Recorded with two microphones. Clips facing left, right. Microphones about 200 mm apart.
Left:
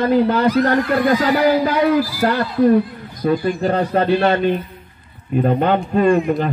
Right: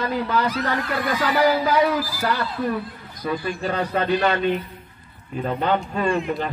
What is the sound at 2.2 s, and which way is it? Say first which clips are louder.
Speech: left 10 dB; 50° left (ahead or behind).